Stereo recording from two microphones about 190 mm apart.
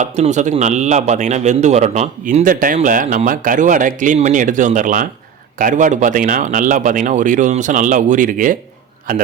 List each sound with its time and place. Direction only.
0.0 s a man's voice: 40° right (ahead or behind)